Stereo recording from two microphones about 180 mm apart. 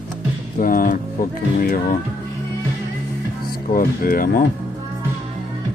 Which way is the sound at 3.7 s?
50° left (ahead or behind).